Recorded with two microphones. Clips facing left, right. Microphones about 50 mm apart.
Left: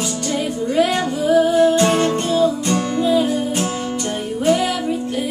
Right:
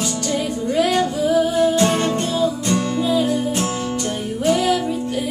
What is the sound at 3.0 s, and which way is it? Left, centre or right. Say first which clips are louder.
Music: left 3 dB; centre.